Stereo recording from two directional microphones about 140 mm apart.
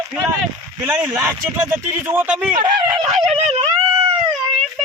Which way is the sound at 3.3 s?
50° right (ahead or behind).